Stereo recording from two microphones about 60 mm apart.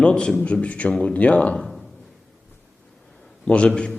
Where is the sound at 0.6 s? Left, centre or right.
Left.